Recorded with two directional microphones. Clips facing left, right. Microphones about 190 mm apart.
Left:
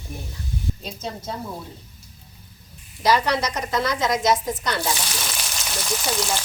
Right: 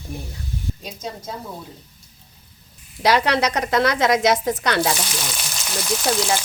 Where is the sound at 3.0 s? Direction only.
70° right (ahead or behind).